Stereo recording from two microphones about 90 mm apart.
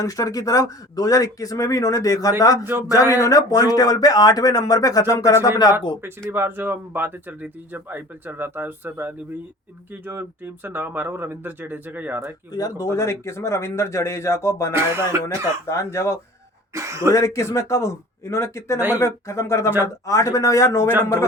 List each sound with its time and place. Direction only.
0.0 s speech: 40° left (ahead or behind)
6.0 s speech: 25° right (ahead or behind)
12.5 s speech: 45° left (ahead or behind)
14.7 s speech: 30° right (ahead or behind)
15.6 s speech: 30° left (ahead or behind)
16.7 s speech: 35° right (ahead or behind)
17.1 s speech: 35° left (ahead or behind)